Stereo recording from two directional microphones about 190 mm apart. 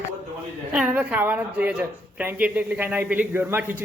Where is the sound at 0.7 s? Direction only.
5° right (ahead or behind).